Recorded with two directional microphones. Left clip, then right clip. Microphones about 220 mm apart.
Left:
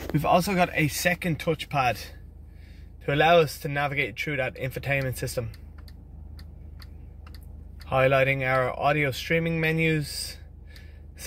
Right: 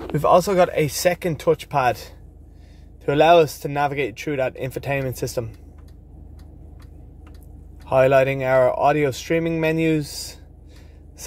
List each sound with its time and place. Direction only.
0.2 s speech: 15° right (ahead or behind)
3.1 s speech: 15° right (ahead or behind)
7.9 s speech: 15° right (ahead or behind)